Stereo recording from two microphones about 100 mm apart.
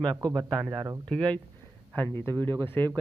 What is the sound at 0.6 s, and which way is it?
Speech, 20° right (ahead or behind).